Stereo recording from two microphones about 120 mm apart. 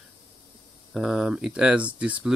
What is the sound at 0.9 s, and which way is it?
Speech, 5° right (ahead or behind).